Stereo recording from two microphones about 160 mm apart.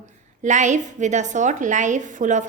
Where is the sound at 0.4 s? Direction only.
50° right (ahead or behind).